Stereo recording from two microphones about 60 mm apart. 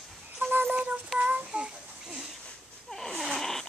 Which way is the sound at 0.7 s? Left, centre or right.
Right.